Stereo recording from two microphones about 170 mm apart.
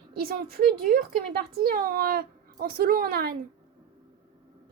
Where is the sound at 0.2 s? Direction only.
65° right (ahead or behind).